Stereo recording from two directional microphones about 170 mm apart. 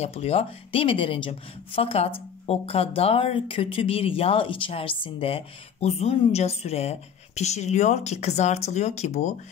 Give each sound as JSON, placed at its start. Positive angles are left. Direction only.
{"t": 0.0, "sound": "speech", "side_deg": 35}